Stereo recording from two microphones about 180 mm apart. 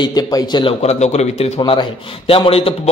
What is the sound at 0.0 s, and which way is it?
Speech, 20° left (ahead or behind).